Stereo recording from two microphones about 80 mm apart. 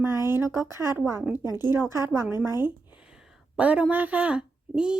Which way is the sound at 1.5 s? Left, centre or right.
Left.